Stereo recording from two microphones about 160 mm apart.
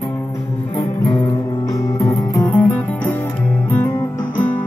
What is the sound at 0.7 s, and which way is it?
Music, 25° left (ahead or behind).